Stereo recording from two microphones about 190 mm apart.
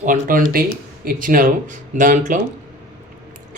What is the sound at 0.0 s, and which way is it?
Speech, 45° right (ahead or behind).